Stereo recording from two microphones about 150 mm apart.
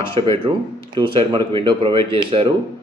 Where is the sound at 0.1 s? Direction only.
35° right (ahead or behind).